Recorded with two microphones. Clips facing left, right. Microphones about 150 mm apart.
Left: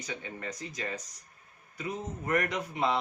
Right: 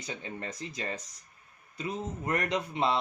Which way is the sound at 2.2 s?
25° right (ahead or behind).